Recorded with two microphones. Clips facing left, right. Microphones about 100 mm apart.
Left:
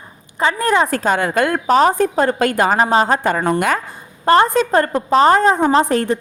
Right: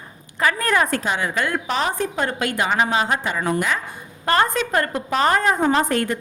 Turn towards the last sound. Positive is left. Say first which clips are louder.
# left 5 dB
turn(degrees=30)  # may be behind; listen again after turning